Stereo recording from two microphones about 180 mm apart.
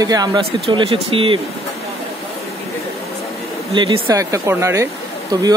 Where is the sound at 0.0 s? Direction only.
20° right (ahead or behind).